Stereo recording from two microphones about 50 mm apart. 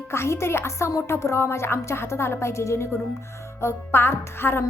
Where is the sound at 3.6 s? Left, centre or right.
Left.